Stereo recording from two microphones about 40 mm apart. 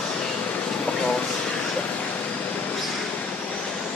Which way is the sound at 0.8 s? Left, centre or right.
Left.